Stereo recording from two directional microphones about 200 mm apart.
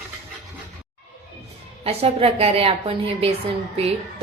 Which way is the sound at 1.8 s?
30° right (ahead or behind).